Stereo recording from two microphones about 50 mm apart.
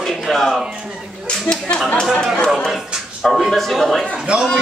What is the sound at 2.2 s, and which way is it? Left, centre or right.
Speech, centre.